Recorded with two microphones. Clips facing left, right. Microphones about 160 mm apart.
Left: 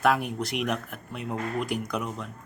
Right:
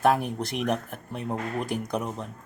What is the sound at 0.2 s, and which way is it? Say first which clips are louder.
Speech: even; 30° right (ahead or behind).